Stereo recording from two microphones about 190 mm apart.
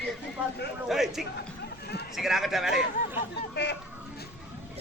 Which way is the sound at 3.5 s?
60° left (ahead or behind).